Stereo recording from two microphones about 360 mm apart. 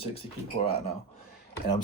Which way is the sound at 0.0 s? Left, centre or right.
Centre.